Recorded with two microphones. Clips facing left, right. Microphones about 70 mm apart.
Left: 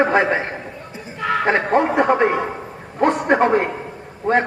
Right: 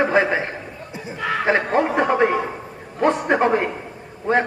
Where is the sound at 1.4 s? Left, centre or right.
Left.